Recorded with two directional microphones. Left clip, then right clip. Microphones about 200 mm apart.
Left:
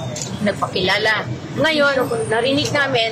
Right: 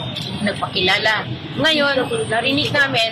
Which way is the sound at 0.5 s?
20° left (ahead or behind).